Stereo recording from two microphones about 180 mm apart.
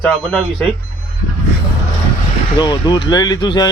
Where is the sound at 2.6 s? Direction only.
25° left (ahead or behind).